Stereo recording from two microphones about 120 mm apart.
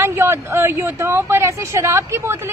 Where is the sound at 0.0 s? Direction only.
20° right (ahead or behind).